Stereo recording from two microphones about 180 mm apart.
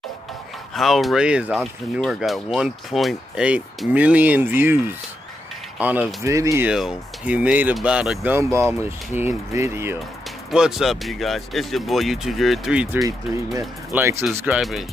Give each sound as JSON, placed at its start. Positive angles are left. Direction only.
{"t": 0.7, "sound": "speech", "side_deg": 0}
{"t": 10.5, "sound": "speech", "side_deg": -5}
{"t": 13.5, "sound": "speech", "side_deg": -15}